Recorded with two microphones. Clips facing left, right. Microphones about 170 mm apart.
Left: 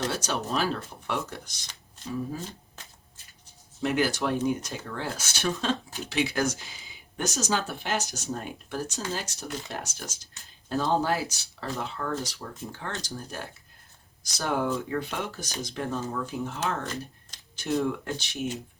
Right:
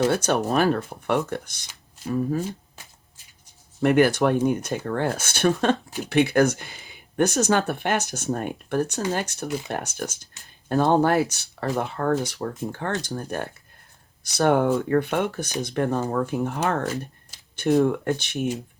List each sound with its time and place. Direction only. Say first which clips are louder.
0.1 s speech: right 8 dB; 55° right (ahead or behind)
3.8 s speech: right 8 dB; 55° right (ahead or behind)